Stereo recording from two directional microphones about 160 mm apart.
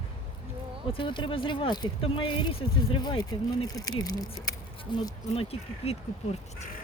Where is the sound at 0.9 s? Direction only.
30° left (ahead or behind).